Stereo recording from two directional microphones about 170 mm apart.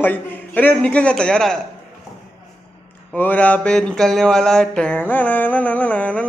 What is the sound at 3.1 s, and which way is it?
Mantra, 10° left (ahead or behind).